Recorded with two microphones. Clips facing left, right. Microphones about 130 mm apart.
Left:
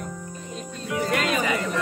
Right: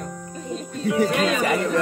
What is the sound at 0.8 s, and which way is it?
Speech, 25° right (ahead or behind).